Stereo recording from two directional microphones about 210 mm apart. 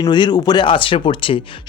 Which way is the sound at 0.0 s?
20° left (ahead or behind).